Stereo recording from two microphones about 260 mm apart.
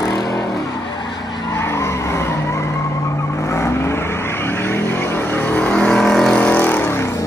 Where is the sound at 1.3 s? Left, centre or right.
Centre.